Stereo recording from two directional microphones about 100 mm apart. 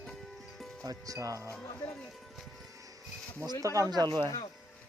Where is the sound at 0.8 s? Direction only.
35° right (ahead or behind).